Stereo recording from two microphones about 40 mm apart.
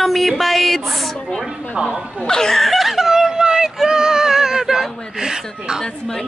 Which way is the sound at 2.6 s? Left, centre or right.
Centre.